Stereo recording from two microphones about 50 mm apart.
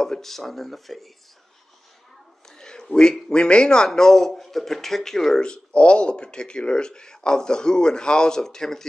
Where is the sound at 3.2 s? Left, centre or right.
Centre.